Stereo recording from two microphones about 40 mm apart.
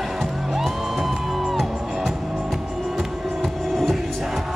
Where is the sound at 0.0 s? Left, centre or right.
Centre.